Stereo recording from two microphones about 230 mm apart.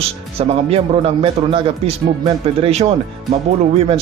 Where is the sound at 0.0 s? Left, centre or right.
Right.